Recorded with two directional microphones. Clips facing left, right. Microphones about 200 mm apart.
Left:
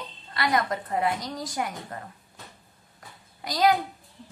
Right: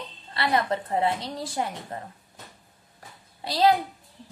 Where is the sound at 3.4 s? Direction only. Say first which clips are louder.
Right 1 dB; 30° right (ahead or behind).